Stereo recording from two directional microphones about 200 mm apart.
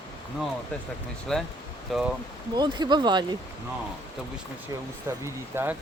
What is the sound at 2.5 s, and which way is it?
Speech, 20° right (ahead or behind).